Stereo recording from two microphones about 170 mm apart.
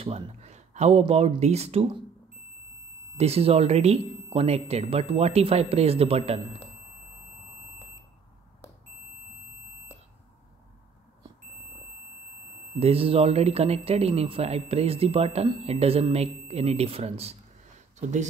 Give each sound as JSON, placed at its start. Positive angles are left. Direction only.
{"t": 0.0, "sound": "speech", "side_deg": -40}
{"t": 3.2, "sound": "speech", "side_deg": -35}
{"t": 12.7, "sound": "speech", "side_deg": -35}